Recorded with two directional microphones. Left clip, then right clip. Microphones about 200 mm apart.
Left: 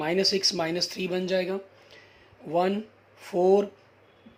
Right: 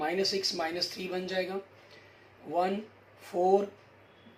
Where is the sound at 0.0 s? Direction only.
55° left (ahead or behind).